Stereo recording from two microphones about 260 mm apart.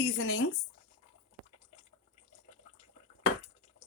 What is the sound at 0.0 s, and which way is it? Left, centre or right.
Speech, left.